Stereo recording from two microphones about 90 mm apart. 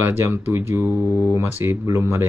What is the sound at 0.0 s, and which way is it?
Speech, 25° right (ahead or behind).